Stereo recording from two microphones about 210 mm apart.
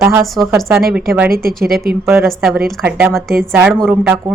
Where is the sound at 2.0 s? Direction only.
10° right (ahead or behind).